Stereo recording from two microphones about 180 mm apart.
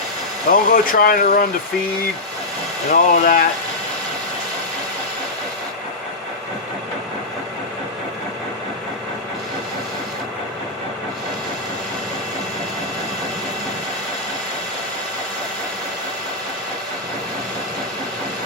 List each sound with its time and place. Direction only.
0.5 s speech: 50° left (ahead or behind)
2.9 s speech: 50° left (ahead or behind)